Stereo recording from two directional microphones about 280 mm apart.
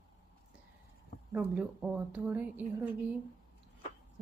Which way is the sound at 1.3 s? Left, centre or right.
Centre.